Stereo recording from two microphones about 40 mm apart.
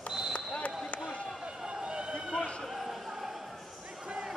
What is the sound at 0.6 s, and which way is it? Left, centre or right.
Basketball bounce, left.